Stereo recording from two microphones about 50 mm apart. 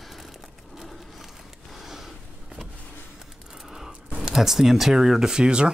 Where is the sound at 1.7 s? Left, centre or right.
Centre.